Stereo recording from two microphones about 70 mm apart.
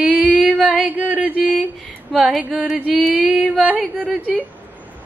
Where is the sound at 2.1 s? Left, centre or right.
Centre.